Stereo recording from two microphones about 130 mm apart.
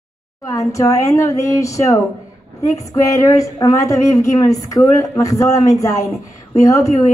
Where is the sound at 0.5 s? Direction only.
25° left (ahead or behind).